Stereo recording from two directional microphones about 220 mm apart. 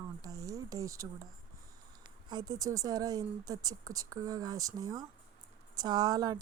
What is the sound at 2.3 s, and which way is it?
Speech, 20° right (ahead or behind).